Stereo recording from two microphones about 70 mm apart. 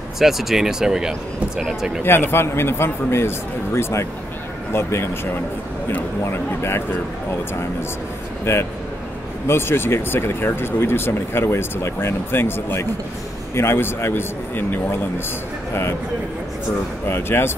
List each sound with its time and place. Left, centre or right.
0.2 s speech: centre
2.0 s speech: left
8.5 s speech: left
17.1 s speech: left